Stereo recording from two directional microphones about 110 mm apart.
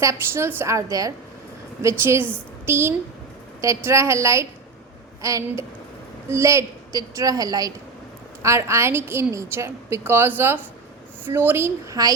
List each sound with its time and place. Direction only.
0.0 s a woman's voice: 25° right (ahead or behind)